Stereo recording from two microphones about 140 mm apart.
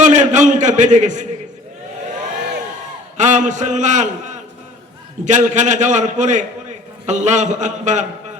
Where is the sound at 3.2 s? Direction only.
60° right (ahead or behind).